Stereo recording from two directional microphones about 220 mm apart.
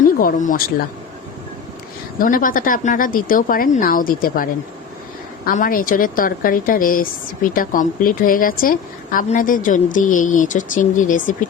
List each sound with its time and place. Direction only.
0.2 s speech: 40° left (ahead or behind)
2.1 s speech: 40° left (ahead or behind)
5.5 s speech: 40° left (ahead or behind)